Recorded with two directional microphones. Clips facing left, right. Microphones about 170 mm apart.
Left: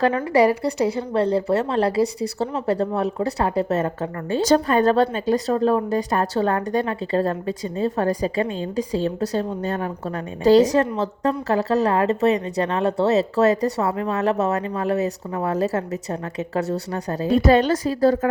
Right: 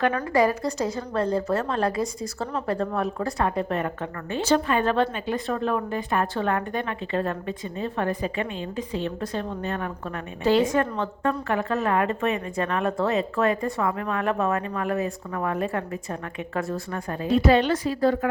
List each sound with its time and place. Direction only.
0.0 s a woman's voice: 30° left (ahead or behind)
4.4 s a woman's voice: 40° left (ahead or behind); by 15.5 s 25° left (ahead or behind)
16.9 s a woman's voice: 30° left (ahead or behind)